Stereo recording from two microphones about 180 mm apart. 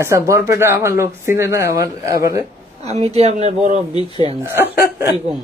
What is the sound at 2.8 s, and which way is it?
Speech, 35° right (ahead or behind).